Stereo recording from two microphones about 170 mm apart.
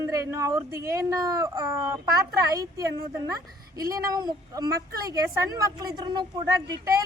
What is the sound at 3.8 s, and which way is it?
A woman's voice, 20° right (ahead or behind).